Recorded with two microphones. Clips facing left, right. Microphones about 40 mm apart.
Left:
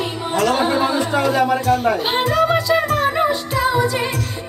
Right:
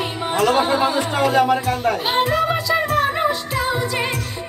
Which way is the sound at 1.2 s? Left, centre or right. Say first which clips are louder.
Right 3 dB; right.